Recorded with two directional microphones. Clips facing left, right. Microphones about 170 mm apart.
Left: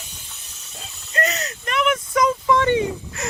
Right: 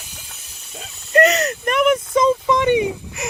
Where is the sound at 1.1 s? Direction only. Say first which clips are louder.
Right 10 dB; 70° right (ahead or behind); by 2.0 s 45° right (ahead or behind).